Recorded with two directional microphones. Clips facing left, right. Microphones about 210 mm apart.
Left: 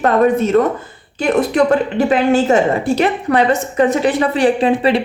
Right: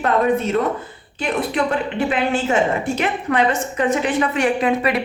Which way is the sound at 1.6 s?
45° left (ahead or behind).